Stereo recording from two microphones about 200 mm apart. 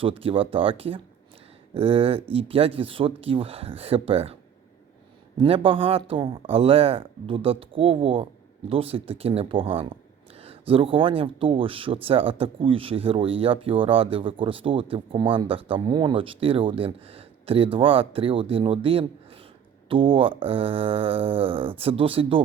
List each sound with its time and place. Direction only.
0.0 s speech: 25° right (ahead or behind)
5.4 s speech: 25° right (ahead or behind)